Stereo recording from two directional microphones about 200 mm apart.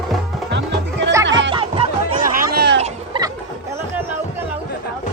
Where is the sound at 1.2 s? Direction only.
65° right (ahead or behind).